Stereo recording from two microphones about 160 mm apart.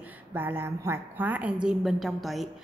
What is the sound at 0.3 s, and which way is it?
A woman's voice, 15° right (ahead or behind).